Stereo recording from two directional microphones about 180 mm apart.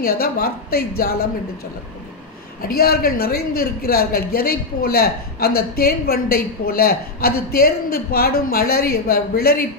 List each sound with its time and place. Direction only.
0.0 s a man's voice: 55° left (ahead or behind)
2.7 s a man's voice: 55° left (ahead or behind)